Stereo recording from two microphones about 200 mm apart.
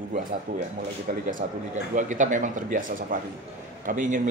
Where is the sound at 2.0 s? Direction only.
40° right (ahead or behind).